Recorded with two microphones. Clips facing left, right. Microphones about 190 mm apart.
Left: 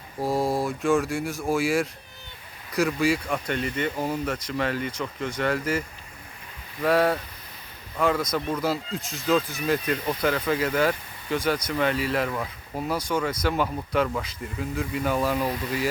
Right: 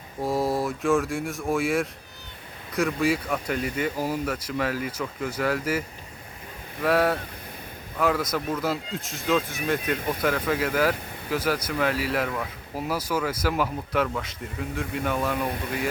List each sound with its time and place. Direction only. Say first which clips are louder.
0.2 s speech: even; centre (ahead or behind)
6.8 s speech: left 1 dB; centre (ahead or behind)